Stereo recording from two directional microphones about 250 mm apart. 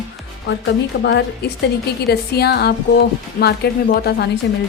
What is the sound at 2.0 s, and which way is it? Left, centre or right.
Music, left.